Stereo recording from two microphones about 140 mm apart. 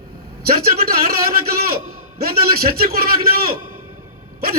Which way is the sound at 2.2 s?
90° right.